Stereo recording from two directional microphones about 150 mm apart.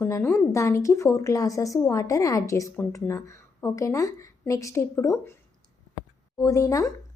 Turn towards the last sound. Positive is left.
turn(degrees=20)  # may be behind; listen again after turning